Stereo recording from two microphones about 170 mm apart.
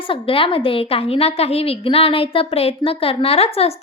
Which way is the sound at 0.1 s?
30° left (ahead or behind).